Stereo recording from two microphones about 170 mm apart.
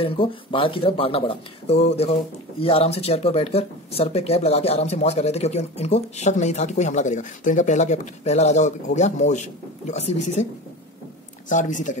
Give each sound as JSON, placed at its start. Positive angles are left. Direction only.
{"t": 0.0, "sound": "speech", "side_deg": 30}
{"t": 11.4, "sound": "speech", "side_deg": 50}